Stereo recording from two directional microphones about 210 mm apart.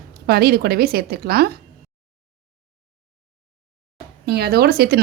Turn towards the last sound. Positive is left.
turn(degrees=-50)  # may be behind; listen again after turning